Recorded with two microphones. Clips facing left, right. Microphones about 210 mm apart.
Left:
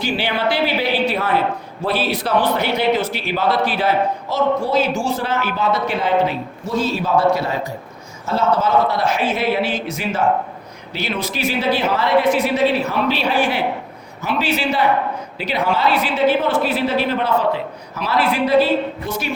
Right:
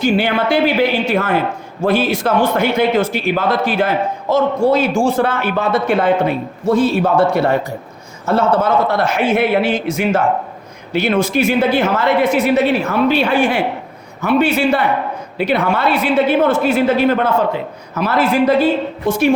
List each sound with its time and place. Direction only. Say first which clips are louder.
0.0 s a man's voice: right 5 dB; 50° right (ahead or behind)